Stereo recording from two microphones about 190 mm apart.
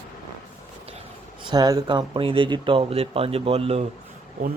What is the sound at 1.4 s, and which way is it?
Speech, 20° right (ahead or behind).